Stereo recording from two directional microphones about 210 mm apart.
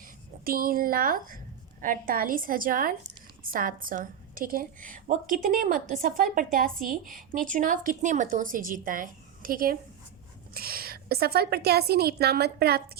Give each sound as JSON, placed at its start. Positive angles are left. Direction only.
{"t": 0.0, "sound": "a woman's voice", "side_deg": -45}